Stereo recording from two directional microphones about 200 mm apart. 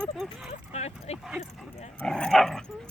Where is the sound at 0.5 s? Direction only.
35° left (ahead or behind).